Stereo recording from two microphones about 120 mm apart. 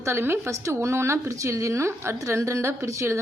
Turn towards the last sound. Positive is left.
turn(degrees=-25)  # may be behind; listen again after turning